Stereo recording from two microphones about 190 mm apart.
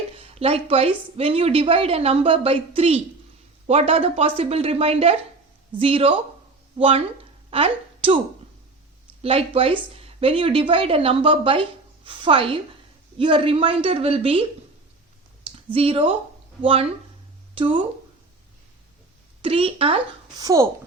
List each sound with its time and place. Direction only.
0.3 s a woman's voice: 30° right (ahead or behind)
9.2 s a woman's voice: 30° right (ahead or behind)
15.4 s speech: 30° right (ahead or behind)
17.5 s speech: 30° right (ahead or behind)
19.4 s a woman's voice: 30° right (ahead or behind)
20.4 s speech: 15° right (ahead or behind)